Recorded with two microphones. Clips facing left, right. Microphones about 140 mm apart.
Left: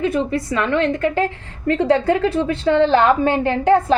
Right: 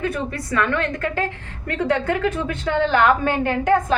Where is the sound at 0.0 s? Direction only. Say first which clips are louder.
Left 6 dB; 20° left (ahead or behind).